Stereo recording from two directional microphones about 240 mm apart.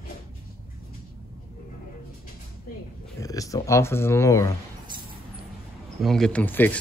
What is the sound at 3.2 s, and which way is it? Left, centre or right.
Speech, centre.